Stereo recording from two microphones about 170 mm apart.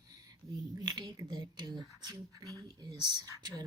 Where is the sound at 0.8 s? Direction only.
25° right (ahead or behind).